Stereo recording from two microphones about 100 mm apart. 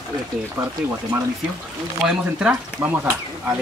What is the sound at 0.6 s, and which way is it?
Speech, 35° right (ahead or behind).